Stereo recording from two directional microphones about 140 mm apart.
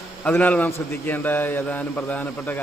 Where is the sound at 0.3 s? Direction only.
10° left (ahead or behind).